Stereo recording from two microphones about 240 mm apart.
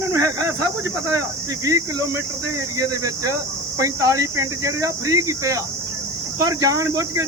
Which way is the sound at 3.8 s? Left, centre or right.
Centre.